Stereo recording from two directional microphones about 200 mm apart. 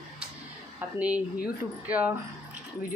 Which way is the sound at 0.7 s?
5° right (ahead or behind).